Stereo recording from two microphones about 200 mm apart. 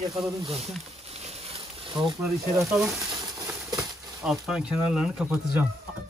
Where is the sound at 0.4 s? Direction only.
30° right (ahead or behind).